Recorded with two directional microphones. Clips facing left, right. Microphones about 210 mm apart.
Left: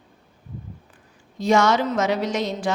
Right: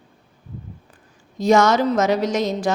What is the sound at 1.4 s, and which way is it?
A woman's voice, 40° right (ahead or behind).